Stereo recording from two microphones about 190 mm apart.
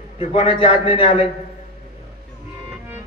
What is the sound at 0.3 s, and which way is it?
Speech, 30° left (ahead or behind).